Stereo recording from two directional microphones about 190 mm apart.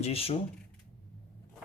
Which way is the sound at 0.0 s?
30° left (ahead or behind).